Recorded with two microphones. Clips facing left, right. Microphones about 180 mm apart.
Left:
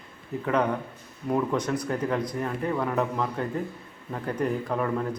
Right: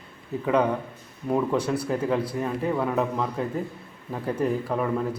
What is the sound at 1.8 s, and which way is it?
Speech, 5° right (ahead or behind).